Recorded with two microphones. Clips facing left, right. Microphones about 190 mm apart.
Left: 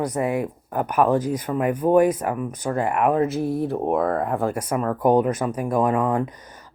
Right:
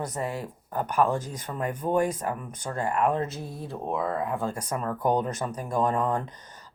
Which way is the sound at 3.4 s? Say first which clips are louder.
Left 12 dB; 65° left (ahead or behind).